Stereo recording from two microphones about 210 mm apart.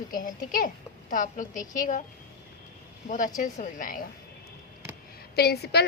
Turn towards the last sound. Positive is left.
turn(degrees=50)  # may be behind; listen again after turning